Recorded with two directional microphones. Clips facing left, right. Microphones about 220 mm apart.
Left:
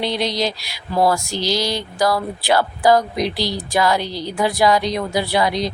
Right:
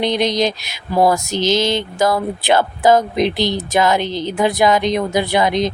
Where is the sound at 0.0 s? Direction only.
20° right (ahead or behind).